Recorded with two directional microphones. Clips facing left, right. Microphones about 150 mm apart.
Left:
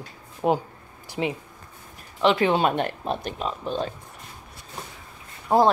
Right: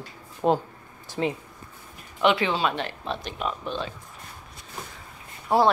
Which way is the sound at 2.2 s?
45° left (ahead or behind).